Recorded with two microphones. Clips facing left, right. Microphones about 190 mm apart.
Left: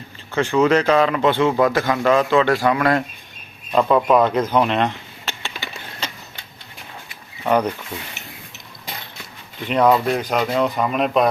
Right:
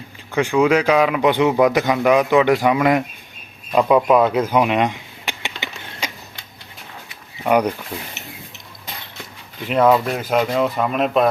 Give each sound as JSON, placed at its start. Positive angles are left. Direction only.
{"t": 0.3, "sound": "speech", "side_deg": -10}
{"t": 3.7, "sound": "a sound", "side_deg": -10}
{"t": 7.4, "sound": "speech", "side_deg": -10}
{"t": 9.6, "sound": "speech", "side_deg": -5}